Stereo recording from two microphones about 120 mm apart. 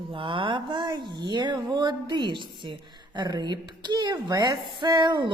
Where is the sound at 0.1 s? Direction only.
45° right (ahead or behind).